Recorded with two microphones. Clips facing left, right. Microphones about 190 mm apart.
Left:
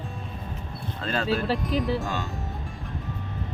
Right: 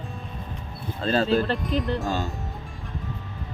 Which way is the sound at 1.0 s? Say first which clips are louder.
Right 6 dB; 30° right (ahead or behind).